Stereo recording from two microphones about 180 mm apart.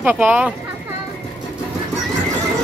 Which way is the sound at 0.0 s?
10° right (ahead or behind).